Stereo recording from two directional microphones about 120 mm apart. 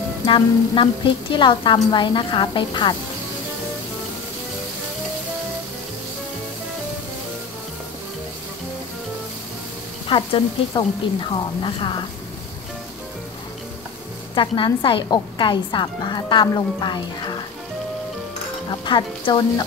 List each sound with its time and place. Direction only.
0.3 s a woman's voice: 45° left (ahead or behind)
10.0 s a woman's voice: 45° left (ahead or behind)
14.3 s a woman's voice: 40° left (ahead or behind)
18.7 s a woman's voice: 40° left (ahead or behind)